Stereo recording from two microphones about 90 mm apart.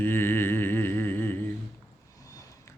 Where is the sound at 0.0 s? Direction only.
25° left (ahead or behind).